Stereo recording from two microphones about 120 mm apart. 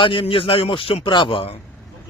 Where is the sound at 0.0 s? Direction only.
45° left (ahead or behind).